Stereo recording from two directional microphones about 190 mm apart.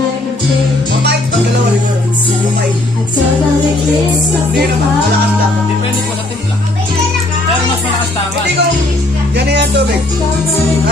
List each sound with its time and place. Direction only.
9.3 s music: 65° right (ahead or behind)